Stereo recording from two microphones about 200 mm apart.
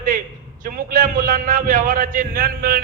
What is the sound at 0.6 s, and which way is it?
A man's voice, 40° right (ahead or behind).